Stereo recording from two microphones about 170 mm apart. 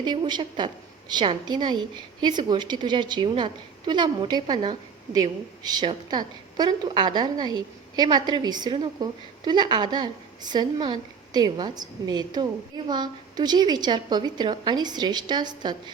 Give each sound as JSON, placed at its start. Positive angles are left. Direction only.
{"t": 0.0, "sound": "a woman's voice", "side_deg": -25}